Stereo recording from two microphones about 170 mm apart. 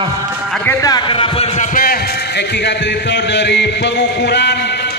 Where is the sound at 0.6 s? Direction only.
20° left (ahead or behind).